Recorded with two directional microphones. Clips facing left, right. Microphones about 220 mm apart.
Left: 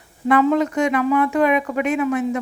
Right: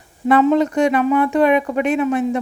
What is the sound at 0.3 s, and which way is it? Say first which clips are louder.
Speech: right 2 dB; 30° right (ahead or behind).